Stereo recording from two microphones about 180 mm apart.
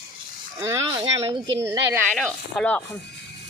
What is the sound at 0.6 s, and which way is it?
Speech, 15° right (ahead or behind).